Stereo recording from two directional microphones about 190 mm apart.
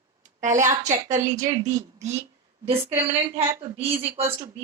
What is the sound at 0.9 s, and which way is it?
Speech, 40° right (ahead or behind).